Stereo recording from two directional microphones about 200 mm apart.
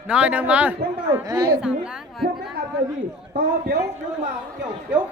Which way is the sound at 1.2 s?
15° right (ahead or behind).